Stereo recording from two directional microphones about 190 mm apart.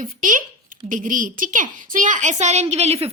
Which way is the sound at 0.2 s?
45° right (ahead or behind).